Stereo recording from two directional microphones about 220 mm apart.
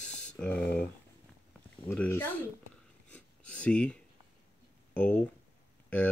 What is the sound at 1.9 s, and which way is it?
Speech, 10° left (ahead or behind).